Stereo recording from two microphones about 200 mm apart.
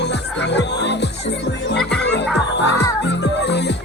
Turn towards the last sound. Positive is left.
turn(degrees=60)  # may be behind; listen again after turning